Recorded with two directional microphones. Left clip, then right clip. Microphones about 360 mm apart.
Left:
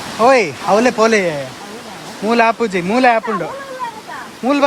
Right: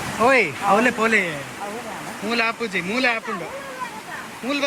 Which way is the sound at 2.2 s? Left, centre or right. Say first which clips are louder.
Left 9 dB; centre.